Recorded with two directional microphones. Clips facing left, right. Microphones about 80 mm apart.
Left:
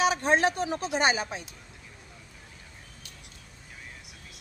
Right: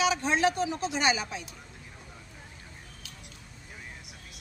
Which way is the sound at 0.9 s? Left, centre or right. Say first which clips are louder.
Left 3 dB; left.